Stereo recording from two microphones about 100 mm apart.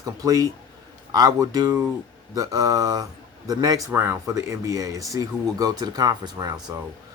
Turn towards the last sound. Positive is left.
turn(degrees=-40)  # may be behind; listen again after turning